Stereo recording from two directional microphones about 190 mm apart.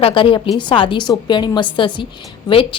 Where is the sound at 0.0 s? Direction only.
25° left (ahead or behind).